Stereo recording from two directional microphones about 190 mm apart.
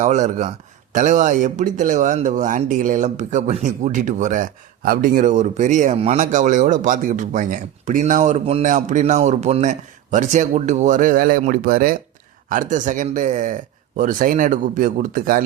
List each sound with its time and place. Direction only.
0.0 s speech: 40° right (ahead or behind)